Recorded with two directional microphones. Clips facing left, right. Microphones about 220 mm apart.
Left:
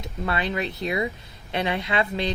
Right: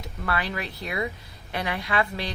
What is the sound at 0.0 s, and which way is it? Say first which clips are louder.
Speech: left 2 dB; 20° left (ahead or behind).